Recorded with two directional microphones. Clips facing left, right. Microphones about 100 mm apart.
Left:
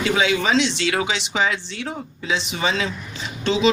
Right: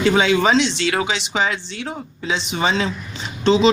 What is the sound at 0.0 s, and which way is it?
A woman's voice, 35° right (ahead or behind).